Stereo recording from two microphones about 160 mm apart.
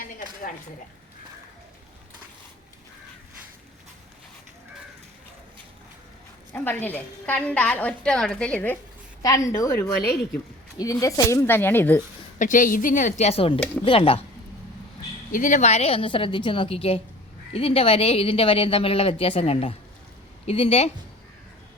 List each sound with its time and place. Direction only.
6.5 s a woman's voice: 10° left (ahead or behind)
9.2 s a woman's voice: 20° left (ahead or behind)
11.0 s a woman's voice: 20° left (ahead or behind)
12.4 s a woman's voice: 55° left (ahead or behind); by 14.3 s 35° left (ahead or behind)
15.3 s a woman's voice: 55° left (ahead or behind)